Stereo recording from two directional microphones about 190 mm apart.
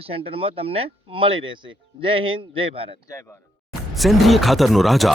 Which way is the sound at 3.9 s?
Centre (ahead or behind).